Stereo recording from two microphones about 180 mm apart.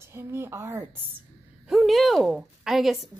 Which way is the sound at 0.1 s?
15° right (ahead or behind).